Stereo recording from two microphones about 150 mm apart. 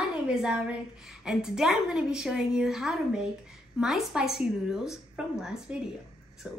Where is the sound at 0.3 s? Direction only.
5° right (ahead or behind).